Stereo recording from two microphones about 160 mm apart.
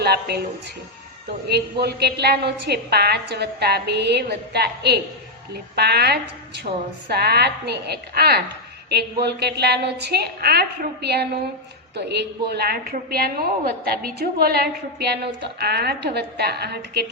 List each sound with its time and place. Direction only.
0.0 s a woman's voice: 90° right
1.8 s a woman's voice: 90° right